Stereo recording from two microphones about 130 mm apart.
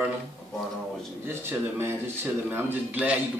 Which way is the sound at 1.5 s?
20° right (ahead or behind).